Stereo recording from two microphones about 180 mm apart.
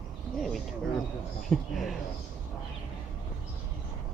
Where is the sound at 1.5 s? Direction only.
Centre (ahead or behind).